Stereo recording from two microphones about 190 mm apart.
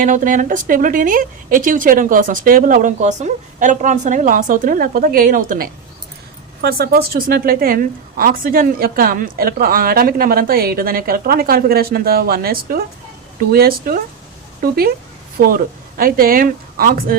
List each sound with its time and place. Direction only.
0.0 s a woman's voice: 45° right (ahead or behind)